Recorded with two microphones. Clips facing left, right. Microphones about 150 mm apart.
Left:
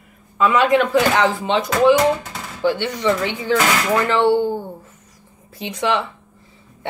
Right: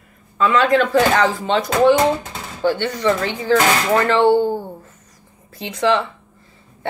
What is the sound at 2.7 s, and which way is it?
Speech, 15° left (ahead or behind).